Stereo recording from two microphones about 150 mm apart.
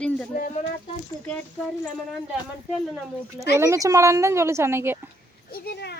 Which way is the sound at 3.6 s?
20° right (ahead or behind).